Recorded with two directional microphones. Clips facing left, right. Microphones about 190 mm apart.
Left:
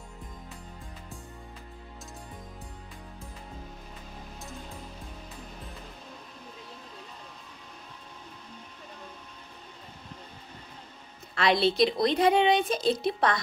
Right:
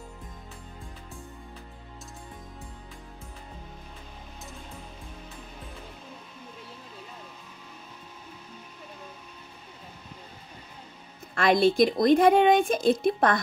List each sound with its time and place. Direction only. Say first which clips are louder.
11.3 s speech: right 3 dB; 50° right (ahead or behind)